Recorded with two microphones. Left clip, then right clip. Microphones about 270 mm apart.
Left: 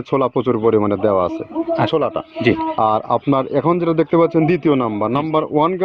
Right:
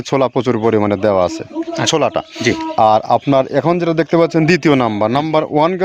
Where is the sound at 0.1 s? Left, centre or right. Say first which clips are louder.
Right 2 dB; right.